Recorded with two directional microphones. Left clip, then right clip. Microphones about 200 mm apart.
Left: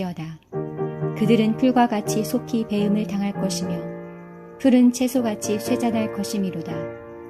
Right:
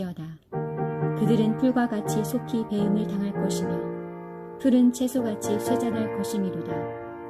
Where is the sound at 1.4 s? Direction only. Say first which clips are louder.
Left 5 dB; centre (ahead or behind).